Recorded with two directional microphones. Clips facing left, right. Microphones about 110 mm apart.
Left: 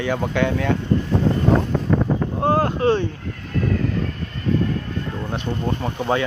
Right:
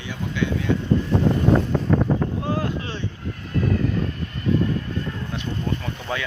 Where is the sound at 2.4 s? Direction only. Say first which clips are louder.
Left 8 dB; 60° left (ahead or behind).